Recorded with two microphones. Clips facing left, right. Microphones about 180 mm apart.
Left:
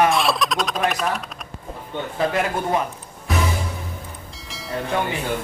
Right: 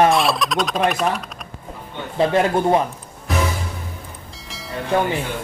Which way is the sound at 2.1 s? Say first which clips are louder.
Right 6 dB; 30° right (ahead or behind).